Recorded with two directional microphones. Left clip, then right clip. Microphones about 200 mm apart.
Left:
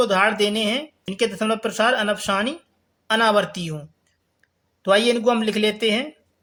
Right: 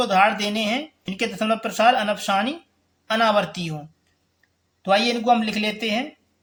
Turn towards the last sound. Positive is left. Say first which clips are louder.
# left 4 dB
turn(degrees=35)  # may be behind; listen again after turning